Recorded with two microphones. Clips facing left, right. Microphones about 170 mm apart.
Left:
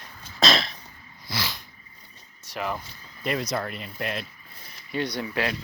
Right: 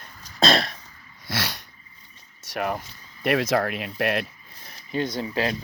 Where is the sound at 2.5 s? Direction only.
55° right (ahead or behind).